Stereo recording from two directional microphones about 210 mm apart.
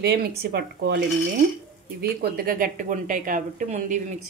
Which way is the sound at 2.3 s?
45° right (ahead or behind).